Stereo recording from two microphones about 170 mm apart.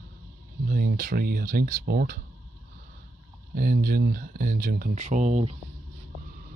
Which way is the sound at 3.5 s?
60° right (ahead or behind).